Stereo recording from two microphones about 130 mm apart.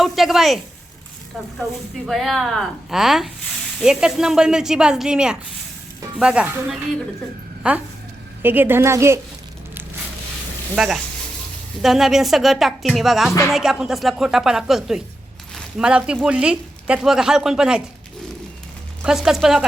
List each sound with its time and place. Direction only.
0.0 s speech: centre (ahead or behind)
2.0 s a woman's voice: centre (ahead or behind); by 9.2 s 20° right (ahead or behind)
10.8 s speech: centre (ahead or behind)
19.0 s speech: 5° right (ahead or behind)